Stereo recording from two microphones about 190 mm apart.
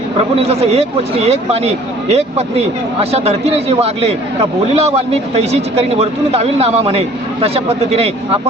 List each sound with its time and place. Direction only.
0.4 s speech: 35° right (ahead or behind)